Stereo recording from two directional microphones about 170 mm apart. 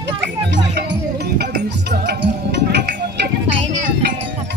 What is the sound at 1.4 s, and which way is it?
Music, 70° right (ahead or behind).